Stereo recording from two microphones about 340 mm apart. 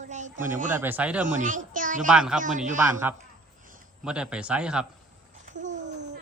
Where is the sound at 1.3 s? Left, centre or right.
Right.